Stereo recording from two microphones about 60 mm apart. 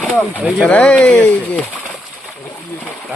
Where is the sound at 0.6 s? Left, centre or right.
Centre.